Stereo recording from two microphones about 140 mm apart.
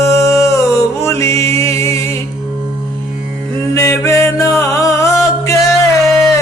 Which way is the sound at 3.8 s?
20° left (ahead or behind).